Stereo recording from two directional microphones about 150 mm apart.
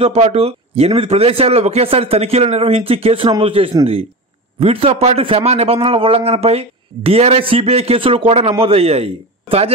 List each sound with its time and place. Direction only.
0.0 s a man's voice: 40° right (ahead or behind)